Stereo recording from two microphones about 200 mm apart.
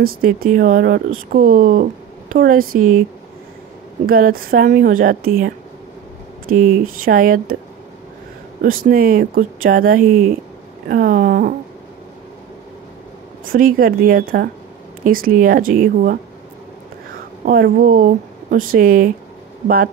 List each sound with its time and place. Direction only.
0.0 s speech: 45° right (ahead or behind)
4.0 s speech: 45° right (ahead or behind)
8.6 s speech: 45° right (ahead or behind)
13.5 s speech: 45° right (ahead or behind)
17.5 s speech: 50° right (ahead or behind)